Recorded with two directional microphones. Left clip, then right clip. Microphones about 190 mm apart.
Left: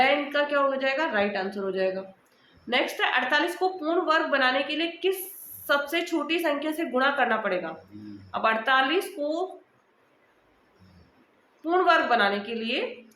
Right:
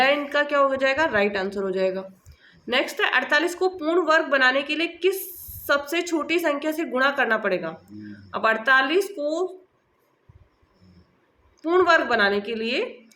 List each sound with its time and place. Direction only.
0.0 s speech: 45° right (ahead or behind)
11.6 s speech: 45° right (ahead or behind)